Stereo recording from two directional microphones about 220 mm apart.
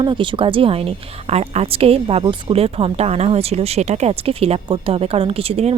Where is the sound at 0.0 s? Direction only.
20° right (ahead or behind).